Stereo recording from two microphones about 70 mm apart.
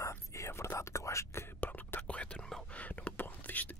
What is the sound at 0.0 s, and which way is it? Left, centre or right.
Whispering, left.